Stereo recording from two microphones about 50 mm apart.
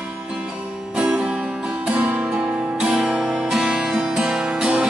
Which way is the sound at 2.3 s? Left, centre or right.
Centre.